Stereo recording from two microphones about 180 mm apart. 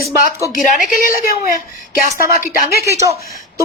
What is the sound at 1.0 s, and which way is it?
Speech, 55° left (ahead or behind).